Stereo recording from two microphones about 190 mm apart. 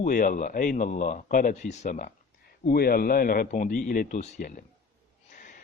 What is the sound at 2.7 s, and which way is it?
A man's voice, 55° left (ahead or behind).